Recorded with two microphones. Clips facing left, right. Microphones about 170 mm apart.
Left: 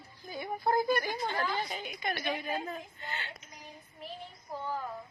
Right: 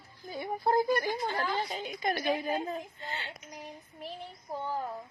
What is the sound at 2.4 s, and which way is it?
Speech, 25° right (ahead or behind).